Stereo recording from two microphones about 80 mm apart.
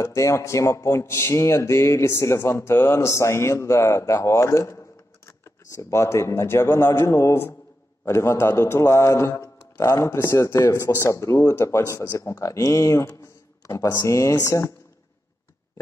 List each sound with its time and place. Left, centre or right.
0.0 s a man's voice: left